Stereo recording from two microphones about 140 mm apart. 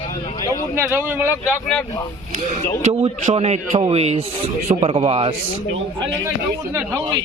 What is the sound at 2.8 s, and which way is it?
A man's voice, 55° right (ahead or behind).